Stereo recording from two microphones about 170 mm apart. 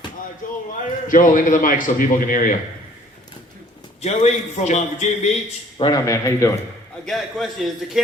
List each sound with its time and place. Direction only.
0.4 s a sound: 55° left (ahead or behind)
1.0 s a man's voice: 50° left (ahead or behind)
4.0 s a man's voice: 40° left (ahead or behind)
5.8 s speech: 20° left (ahead or behind)
7.0 s a man's voice: centre (ahead or behind)